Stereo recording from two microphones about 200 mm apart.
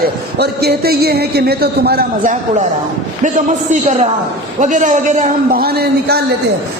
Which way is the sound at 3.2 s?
40° right (ahead or behind).